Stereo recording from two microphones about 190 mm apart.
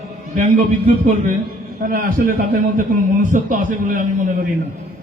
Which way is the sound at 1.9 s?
45° right (ahead or behind).